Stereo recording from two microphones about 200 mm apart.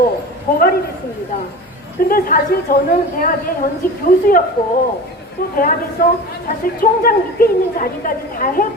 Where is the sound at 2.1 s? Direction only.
45° left (ahead or behind).